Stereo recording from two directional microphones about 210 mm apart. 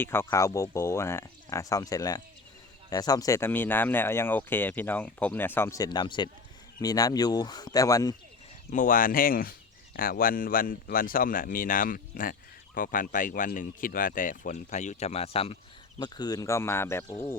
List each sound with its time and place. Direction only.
0.0 s speech: 10° left (ahead or behind)
8.7 s speech: 40° left (ahead or behind); by 17.3 s 10° left (ahead or behind)